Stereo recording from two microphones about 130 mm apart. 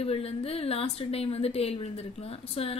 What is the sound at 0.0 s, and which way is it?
A woman's voice, 50° left (ahead or behind).